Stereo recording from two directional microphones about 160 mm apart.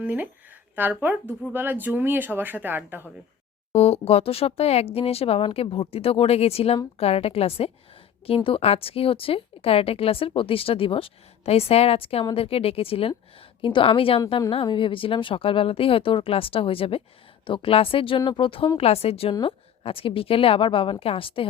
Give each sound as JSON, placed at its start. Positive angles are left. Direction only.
{"t": 0.0, "sound": "speech", "side_deg": -10}
{"t": 3.7, "sound": "a woman's voice", "side_deg": 40}